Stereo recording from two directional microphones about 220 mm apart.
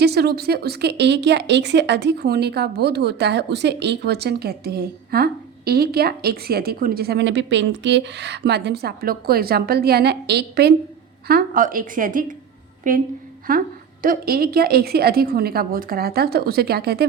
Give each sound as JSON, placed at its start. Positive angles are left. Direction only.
{"t": 0.0, "sound": "speech", "side_deg": -45}